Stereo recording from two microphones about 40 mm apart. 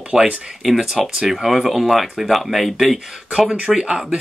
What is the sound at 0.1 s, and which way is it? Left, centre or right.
Speech, centre.